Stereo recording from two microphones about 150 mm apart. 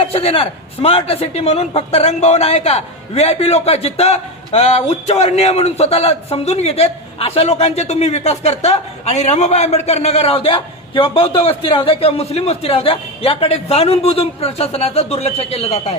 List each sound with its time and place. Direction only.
0.0 s a man's voice: 40° left (ahead or behind)